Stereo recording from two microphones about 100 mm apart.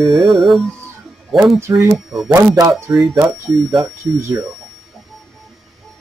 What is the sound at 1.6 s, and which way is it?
Speech, 30° right (ahead or behind).